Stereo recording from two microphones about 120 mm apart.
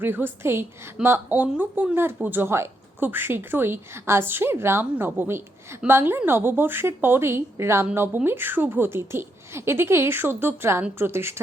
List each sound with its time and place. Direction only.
0.0 s a woman's voice: 15° right (ahead or behind)